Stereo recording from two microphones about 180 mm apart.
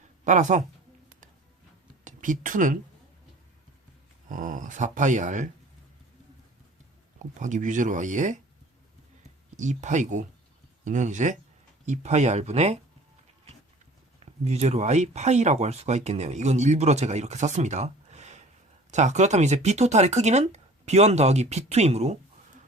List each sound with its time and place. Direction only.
0.3 s speech: 45° right (ahead or behind)
2.0 s speech: 45° right (ahead or behind)
4.3 s speech: 45° right (ahead or behind)
7.2 s speech: 45° right (ahead or behind)
9.6 s speech: 40° right (ahead or behind)
14.4 s speech: 35° right (ahead or behind)